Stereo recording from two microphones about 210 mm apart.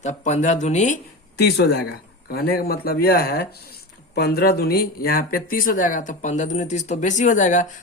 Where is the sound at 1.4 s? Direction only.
50° left (ahead or behind).